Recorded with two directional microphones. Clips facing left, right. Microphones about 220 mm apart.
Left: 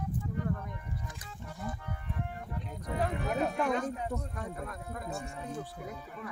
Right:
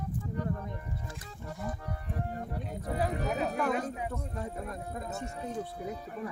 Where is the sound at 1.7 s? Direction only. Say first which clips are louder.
Right 1 dB; 35° right (ahead or behind).